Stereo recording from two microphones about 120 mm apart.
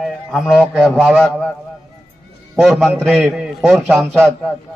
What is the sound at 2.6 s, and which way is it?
A man's voice, centre (ahead or behind).